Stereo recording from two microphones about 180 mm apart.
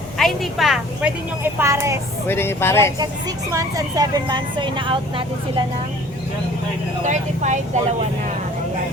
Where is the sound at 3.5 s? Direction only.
20° right (ahead or behind).